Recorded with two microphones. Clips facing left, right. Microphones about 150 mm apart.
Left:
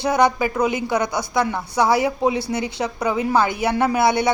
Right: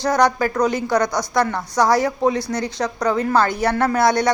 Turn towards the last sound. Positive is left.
turn(degrees=5)  # may be behind; listen again after turning